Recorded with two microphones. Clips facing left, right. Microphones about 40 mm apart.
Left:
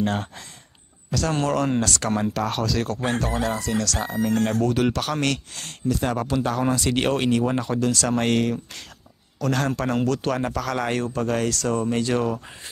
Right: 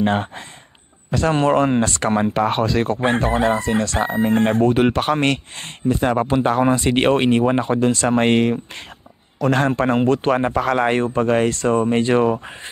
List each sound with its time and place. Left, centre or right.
0.0 s speech: right